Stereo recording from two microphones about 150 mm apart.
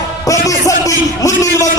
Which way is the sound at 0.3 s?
20° left (ahead or behind).